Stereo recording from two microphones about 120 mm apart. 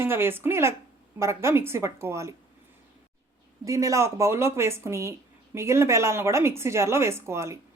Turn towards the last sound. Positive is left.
turn(degrees=-25)  # may be behind; listen again after turning